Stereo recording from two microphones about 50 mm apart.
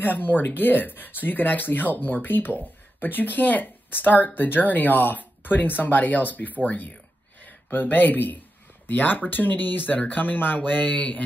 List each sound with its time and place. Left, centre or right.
0.0 s speech: left